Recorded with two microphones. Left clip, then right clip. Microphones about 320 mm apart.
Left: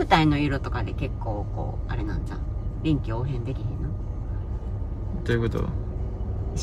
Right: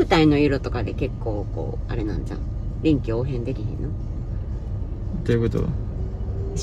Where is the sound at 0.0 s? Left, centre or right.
Centre.